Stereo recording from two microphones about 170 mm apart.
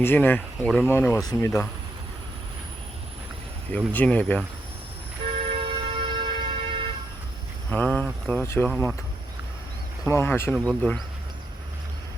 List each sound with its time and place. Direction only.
0.0 s speech: 10° left (ahead or behind)
3.7 s speech: 10° left (ahead or behind)
5.3 s vehicle: 30° right (ahead or behind)
7.7 s speech: 10° left (ahead or behind)
10.1 s speech: 15° left (ahead or behind)